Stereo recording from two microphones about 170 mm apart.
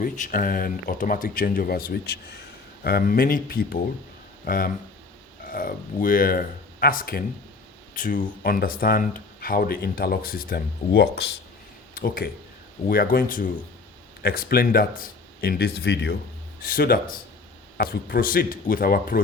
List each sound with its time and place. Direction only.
0.0 s speech: 50° left (ahead or behind); by 16.1 s 75° left (ahead or behind)
16.6 s speech: 60° left (ahead or behind)